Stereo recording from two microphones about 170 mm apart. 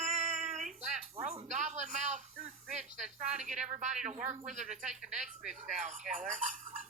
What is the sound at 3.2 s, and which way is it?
Speech, 45° right (ahead or behind).